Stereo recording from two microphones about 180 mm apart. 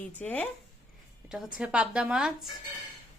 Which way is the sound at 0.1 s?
10° left (ahead or behind).